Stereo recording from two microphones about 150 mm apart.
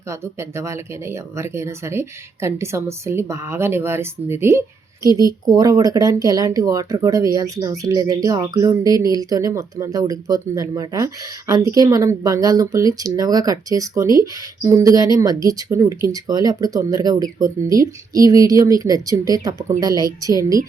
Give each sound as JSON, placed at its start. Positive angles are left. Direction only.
{"t": 0.1, "sound": "speech", "side_deg": -20}